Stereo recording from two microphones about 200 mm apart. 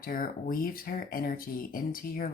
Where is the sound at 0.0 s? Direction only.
45° left (ahead or behind).